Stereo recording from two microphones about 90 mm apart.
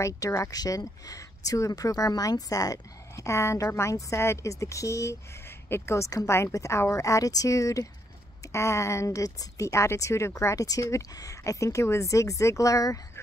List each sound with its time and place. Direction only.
0.0 s speech: 35° left (ahead or behind)